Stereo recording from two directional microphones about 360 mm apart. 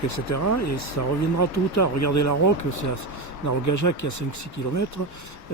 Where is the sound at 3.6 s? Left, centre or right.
Left.